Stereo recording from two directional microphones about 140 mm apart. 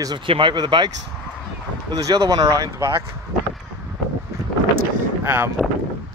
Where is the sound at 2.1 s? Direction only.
25° right (ahead or behind).